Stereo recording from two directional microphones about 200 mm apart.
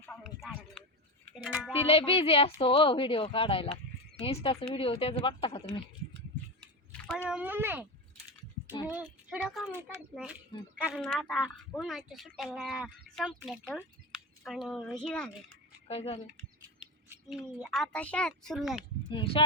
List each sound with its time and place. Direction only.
0.0 s music: 10° left (ahead or behind)
0.4 s a sound: centre (ahead or behind)
1.5 s a woman's voice: 5° right (ahead or behind)
1.8 s a woman's voice: 30° left (ahead or behind)
6.6 s a sound: 5° left (ahead or behind)
7.3 s speech: 5° right (ahead or behind)
8.9 s a woman's voice: 5° right (ahead or behind)
15.9 s a woman's voice: 30° left (ahead or behind)
17.1 s a woman's voice: 5° right (ahead or behind)
19.0 s speech: 25° left (ahead or behind)